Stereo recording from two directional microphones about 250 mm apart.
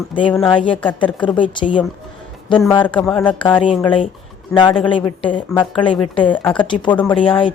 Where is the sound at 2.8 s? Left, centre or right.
Centre.